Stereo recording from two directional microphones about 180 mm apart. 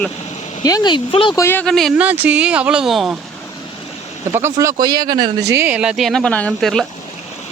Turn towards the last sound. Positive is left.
turn(degrees=0)  # may be behind; listen again after turning